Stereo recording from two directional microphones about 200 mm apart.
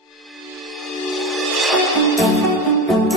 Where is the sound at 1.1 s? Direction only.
Centre (ahead or behind).